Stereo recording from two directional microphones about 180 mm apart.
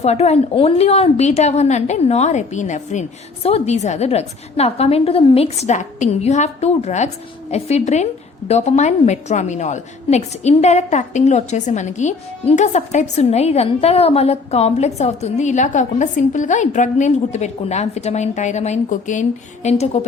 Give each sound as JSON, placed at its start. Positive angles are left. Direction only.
{"t": 0.0, "sound": "a woman's voice", "side_deg": 35}